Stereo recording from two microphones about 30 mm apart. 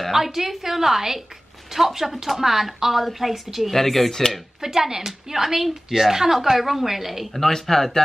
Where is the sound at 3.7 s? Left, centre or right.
Centre.